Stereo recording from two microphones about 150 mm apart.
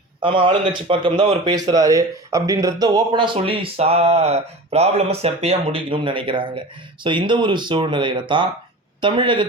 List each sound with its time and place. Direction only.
0.2 s speech: 35° right (ahead or behind)